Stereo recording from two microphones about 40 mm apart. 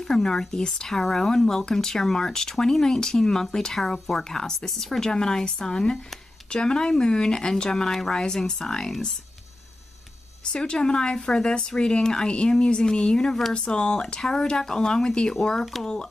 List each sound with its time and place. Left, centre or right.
0.0 s speech: centre
10.4 s speech: left